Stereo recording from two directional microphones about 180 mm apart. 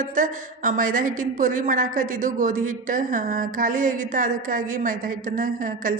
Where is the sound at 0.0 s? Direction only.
45° right (ahead or behind).